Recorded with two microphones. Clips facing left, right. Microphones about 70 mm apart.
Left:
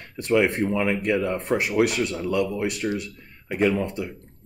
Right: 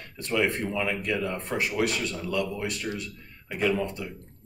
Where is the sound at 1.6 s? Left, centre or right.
Centre.